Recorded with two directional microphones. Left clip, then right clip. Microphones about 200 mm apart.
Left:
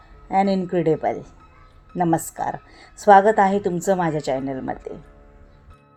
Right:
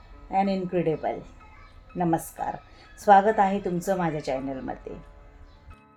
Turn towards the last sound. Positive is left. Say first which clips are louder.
# left 5 dB
turn(degrees=45)  # may be behind; listen again after turning